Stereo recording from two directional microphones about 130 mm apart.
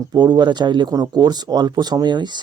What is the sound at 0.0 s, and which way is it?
Speech, 30° right (ahead or behind).